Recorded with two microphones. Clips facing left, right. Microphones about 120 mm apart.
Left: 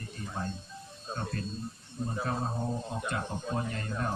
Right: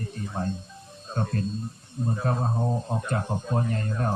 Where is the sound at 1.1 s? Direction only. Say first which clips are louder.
Right 7 dB; 45° right (ahead or behind).